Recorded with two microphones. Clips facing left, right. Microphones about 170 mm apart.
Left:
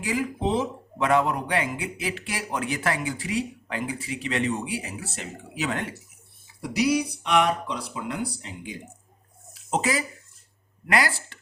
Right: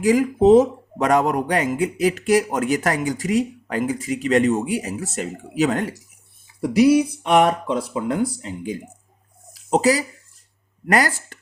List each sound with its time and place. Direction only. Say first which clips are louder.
0.0 s speech: right 11 dB; 45° right (ahead or behind)
6.6 s speech: right 9 dB; 50° right (ahead or behind)
9.5 s a sound: right 8 dB; 40° right (ahead or behind)
10.8 s speech: right 5 dB; 45° right (ahead or behind)